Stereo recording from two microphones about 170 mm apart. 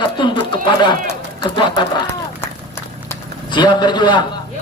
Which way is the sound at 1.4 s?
25° left (ahead or behind).